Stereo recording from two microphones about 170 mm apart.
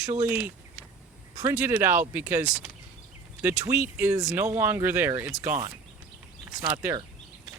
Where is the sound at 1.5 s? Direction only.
10° right (ahead or behind).